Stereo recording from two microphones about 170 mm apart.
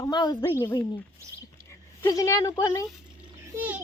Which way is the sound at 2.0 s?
20° left (ahead or behind).